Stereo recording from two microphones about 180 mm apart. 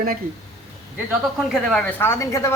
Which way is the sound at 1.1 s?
Centre (ahead or behind).